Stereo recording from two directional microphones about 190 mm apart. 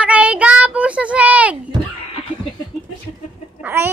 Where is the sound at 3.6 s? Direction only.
10° right (ahead or behind).